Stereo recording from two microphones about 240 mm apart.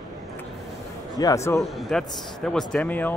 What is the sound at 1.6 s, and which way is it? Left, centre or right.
A man's voice, centre.